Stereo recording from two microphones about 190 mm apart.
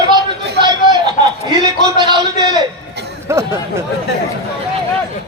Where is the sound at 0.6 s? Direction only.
25° right (ahead or behind).